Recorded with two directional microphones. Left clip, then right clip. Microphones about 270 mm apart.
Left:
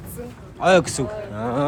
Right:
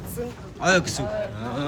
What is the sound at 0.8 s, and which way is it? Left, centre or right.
Speech, left.